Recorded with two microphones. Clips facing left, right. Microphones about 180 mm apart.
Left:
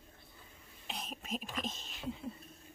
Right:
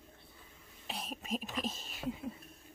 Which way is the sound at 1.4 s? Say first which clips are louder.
Right 2 dB; 5° right (ahead or behind).